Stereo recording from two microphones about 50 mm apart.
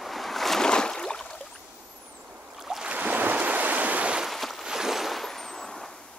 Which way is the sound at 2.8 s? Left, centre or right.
Right.